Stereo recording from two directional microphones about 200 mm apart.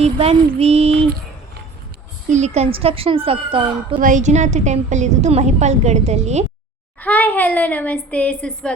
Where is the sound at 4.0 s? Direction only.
40° right (ahead or behind).